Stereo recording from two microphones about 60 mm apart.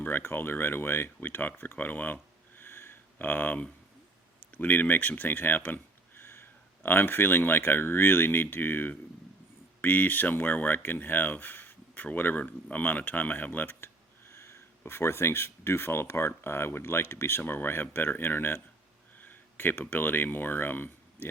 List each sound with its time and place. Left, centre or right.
0.0 s speech: left